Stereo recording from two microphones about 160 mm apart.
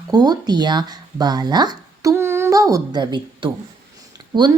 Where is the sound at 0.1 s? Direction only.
25° right (ahead or behind).